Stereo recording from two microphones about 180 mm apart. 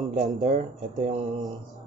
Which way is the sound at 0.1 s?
40° right (ahead or behind).